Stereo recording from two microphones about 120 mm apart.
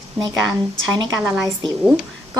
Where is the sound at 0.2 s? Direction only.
30° right (ahead or behind).